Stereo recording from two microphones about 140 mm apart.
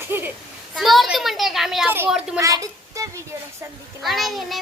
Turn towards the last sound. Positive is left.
turn(degrees=0)  # may be behind; listen again after turning